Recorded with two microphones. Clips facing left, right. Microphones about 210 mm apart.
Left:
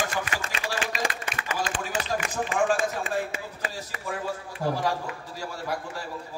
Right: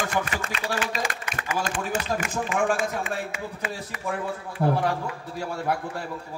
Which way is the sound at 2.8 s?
35° left (ahead or behind).